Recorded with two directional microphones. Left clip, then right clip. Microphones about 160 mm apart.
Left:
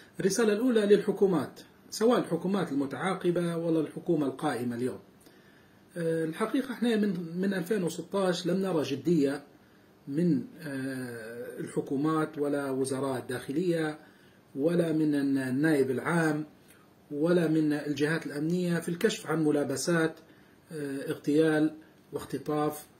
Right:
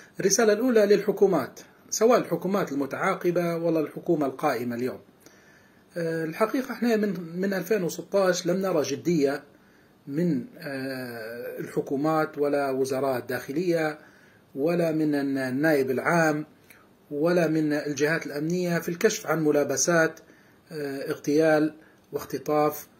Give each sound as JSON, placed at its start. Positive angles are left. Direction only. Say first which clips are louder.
{"t": 0.2, "sound": "speech", "louder": "right 5 dB", "side_deg": 20}
{"t": 5.9, "sound": "speech", "louder": "right 4 dB", "side_deg": 20}
{"t": 10.4, "sound": "speech", "louder": "right 4 dB", "side_deg": 20}